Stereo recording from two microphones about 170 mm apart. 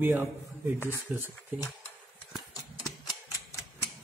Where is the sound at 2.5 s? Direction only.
20° left (ahead or behind).